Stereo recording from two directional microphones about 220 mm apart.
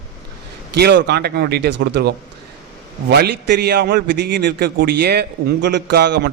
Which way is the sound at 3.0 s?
50° right (ahead or behind).